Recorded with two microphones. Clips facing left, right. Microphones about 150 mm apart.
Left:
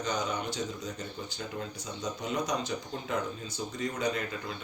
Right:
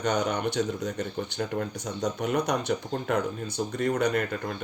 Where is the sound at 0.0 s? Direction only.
65° right (ahead or behind).